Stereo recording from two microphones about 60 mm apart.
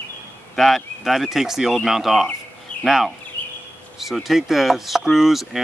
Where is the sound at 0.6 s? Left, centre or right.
Centre.